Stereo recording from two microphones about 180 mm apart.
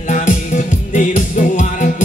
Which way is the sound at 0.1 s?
40° left (ahead or behind).